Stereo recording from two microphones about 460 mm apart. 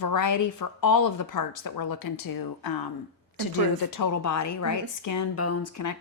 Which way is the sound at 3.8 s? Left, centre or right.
Left.